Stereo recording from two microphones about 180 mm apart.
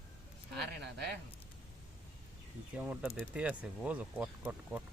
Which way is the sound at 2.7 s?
5° right (ahead or behind).